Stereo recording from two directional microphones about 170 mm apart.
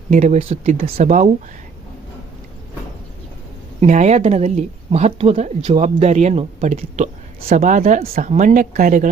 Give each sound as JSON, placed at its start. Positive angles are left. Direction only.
{"t": 0.1, "sound": "speech", "side_deg": -45}
{"t": 3.8, "sound": "speech", "side_deg": -45}
{"t": 8.1, "sound": "speech", "side_deg": -50}